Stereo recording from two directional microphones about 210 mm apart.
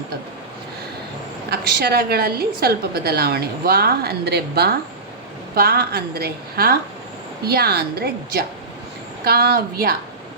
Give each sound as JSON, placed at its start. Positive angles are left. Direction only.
{"t": 1.5, "sound": "a woman's voice", "side_deg": -50}